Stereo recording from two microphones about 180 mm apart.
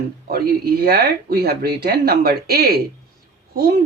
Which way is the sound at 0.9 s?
60° right (ahead or behind).